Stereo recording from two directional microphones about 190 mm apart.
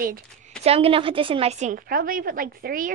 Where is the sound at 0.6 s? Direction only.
30° right (ahead or behind).